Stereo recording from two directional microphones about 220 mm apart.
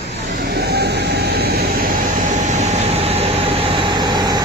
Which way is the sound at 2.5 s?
30° right (ahead or behind).